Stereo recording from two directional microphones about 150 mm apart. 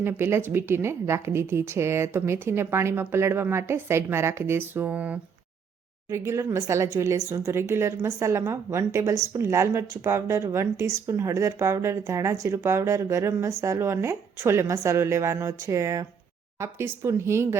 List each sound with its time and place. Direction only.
0.0 s a woman's voice: 15° right (ahead or behind)